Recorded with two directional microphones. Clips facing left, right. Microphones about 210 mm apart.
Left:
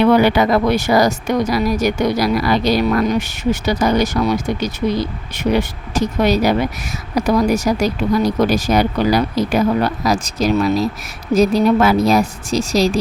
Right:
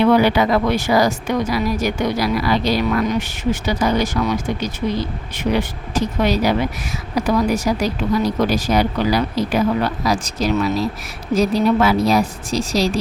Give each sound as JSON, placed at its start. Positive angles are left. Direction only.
{"t": 0.2, "sound": "speech", "side_deg": 50}